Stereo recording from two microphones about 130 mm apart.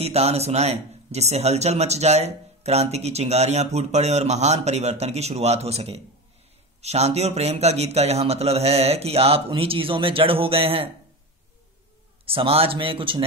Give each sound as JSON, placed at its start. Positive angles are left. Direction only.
{"t": 0.0, "sound": "a man's voice", "side_deg": -55}
{"t": 12.3, "sound": "a man's voice", "side_deg": -45}